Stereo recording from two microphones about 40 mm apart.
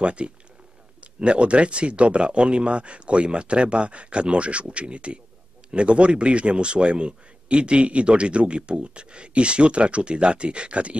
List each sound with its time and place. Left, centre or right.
0.0 s speech: right